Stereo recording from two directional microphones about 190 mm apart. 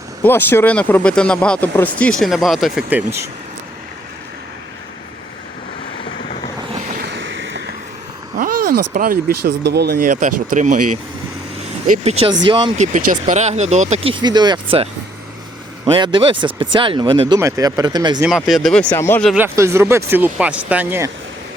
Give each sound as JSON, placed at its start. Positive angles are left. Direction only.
{"t": 0.2, "sound": "speech", "side_deg": 10}
{"t": 7.0, "sound": "vehicle", "side_deg": -70}
{"t": 8.4, "sound": "a sound", "side_deg": -50}
{"t": 9.6, "sound": "speech", "side_deg": -60}
{"t": 15.9, "sound": "speech", "side_deg": -25}
{"t": 18.3, "sound": "speech", "side_deg": 0}
{"t": 19.2, "sound": "speech", "side_deg": -5}
{"t": 19.5, "sound": "speech", "side_deg": -15}